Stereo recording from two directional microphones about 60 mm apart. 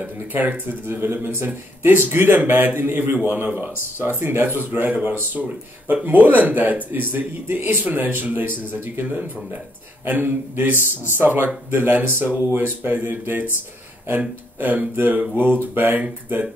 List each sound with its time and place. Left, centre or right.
0.0 s speech: right
14.6 s speech: right